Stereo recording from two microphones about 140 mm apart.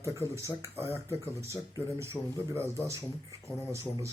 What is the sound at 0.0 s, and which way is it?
Speech, 20° right (ahead or behind).